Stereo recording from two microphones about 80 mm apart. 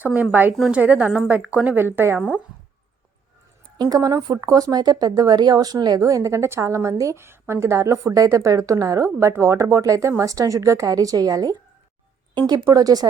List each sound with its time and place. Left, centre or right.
0.0 s a woman's voice: right
3.8 s speech: right
6.0 s a woman's voice: right
7.2 s a woman's voice: right
12.3 s speech: right
12.6 s speech: right